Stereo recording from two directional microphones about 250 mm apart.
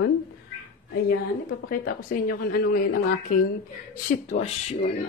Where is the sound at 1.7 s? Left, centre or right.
Left.